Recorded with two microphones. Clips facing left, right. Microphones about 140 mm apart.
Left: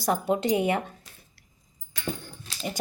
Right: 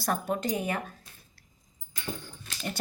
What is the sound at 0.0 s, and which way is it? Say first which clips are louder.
Speech: left 5 dB; 15° left (ahead or behind).